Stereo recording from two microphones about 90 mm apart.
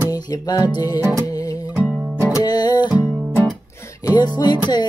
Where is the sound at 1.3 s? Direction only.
40° left (ahead or behind).